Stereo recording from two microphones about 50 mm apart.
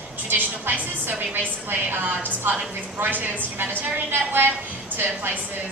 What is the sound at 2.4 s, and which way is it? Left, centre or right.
A woman's voice, right.